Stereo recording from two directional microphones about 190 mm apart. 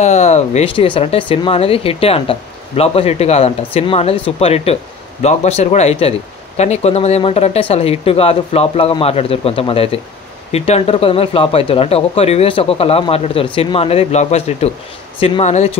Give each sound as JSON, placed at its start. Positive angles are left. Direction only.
{"t": 0.0, "sound": "a man's voice", "side_deg": 35}